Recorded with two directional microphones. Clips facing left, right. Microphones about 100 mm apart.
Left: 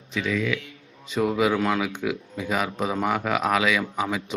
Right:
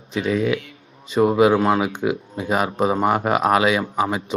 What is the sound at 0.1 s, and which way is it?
A man's voice, 40° right (ahead or behind).